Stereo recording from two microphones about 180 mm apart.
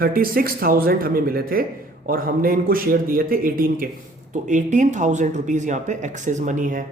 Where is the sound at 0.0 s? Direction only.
55° right (ahead or behind).